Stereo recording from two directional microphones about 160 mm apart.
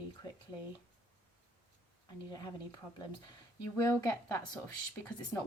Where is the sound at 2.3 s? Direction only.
25° left (ahead or behind).